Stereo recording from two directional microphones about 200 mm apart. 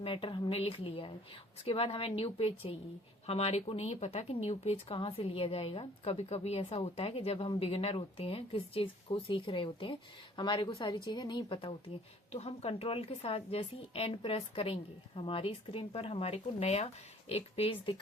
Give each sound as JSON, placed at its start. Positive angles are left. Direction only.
{"t": 0.0, "sound": "speech", "side_deg": 25}